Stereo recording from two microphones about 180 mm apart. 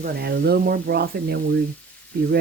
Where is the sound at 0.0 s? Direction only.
60° right (ahead or behind).